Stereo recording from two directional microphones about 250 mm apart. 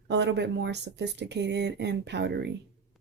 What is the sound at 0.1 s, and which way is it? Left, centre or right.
Speech, right.